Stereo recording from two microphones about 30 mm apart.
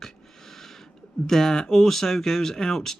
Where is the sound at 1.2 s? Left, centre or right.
Centre.